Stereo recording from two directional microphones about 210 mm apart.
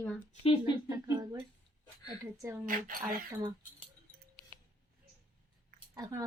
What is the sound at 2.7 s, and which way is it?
Speech, 40° right (ahead or behind).